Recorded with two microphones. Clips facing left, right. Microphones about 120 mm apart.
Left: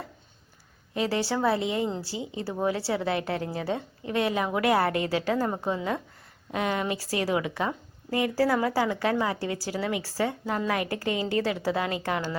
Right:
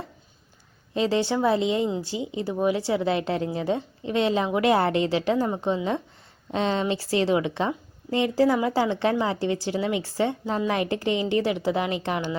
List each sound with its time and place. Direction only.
0.9 s a woman's voice: 20° right (ahead or behind)